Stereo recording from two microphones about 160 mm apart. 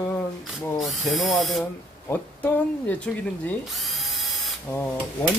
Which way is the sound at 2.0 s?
10° left (ahead or behind).